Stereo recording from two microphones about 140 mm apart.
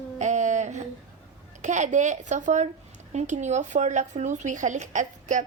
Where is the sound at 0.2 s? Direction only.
60° right (ahead or behind).